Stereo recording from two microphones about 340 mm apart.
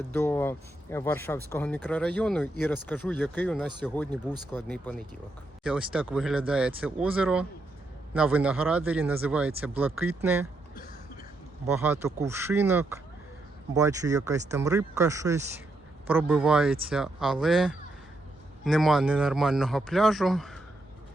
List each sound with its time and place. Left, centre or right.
0.1 s speech: centre
4.1 s speech: centre
11.6 s speech: centre